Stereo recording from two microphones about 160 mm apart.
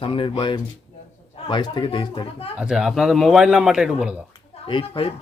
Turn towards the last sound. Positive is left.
turn(degrees=35)  # may be behind; listen again after turning